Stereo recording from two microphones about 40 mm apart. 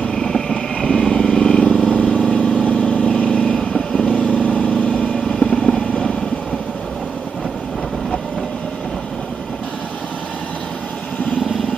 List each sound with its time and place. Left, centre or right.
0.1 s vehicle: centre
1.7 s vehicle: left
3.5 s vehicle: centre
4.1 s vehicle: left
4.6 s vehicle: left
5.2 s vehicle: centre